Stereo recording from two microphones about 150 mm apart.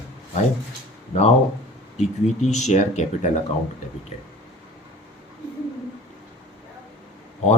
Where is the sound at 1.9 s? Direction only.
50° left (ahead or behind).